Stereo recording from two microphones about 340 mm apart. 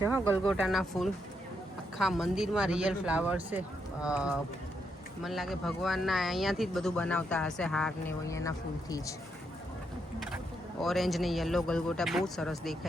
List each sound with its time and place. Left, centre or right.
0.6 s speech: centre
10.8 s speech: centre